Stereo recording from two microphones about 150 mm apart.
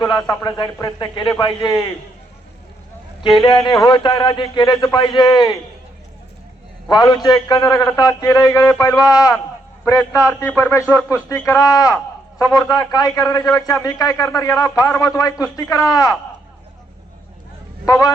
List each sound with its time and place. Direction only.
0.0 s a man's voice: 25° left (ahead or behind)
3.3 s a man's voice: 30° left (ahead or behind)
6.9 s a man's voice: 30° left (ahead or behind)
17.8 s a man's voice: 20° left (ahead or behind)